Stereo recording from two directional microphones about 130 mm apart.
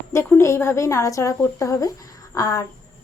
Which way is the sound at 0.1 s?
20° left (ahead or behind).